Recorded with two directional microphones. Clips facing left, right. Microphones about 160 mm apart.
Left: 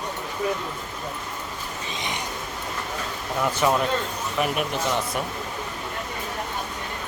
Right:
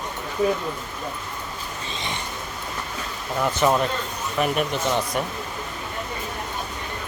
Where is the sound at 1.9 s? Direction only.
15° left (ahead or behind).